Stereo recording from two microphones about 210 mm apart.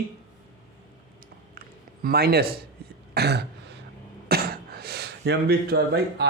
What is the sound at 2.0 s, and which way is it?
A man's voice, 45° right (ahead or behind).